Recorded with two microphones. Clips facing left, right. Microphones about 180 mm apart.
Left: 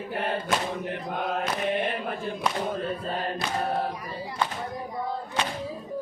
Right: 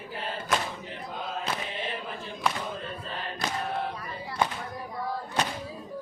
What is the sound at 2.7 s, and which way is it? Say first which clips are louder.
Chant: left 7 dB; 45° left (ahead or behind).